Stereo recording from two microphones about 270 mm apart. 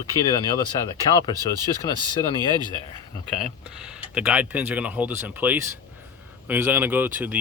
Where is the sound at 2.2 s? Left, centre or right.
Centre.